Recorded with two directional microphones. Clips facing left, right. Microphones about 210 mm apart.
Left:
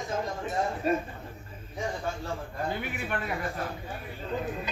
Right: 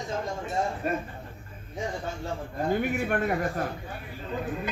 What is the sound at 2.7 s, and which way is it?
Speech, 45° right (ahead or behind).